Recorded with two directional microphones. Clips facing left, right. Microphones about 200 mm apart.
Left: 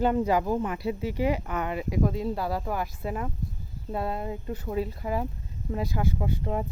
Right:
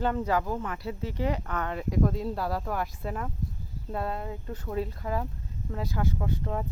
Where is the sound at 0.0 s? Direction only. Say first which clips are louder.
Left 4 dB; 15° left (ahead or behind).